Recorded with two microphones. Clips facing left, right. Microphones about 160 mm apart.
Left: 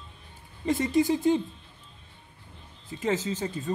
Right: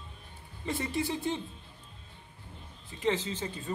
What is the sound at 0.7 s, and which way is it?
Speech, 40° left (ahead or behind).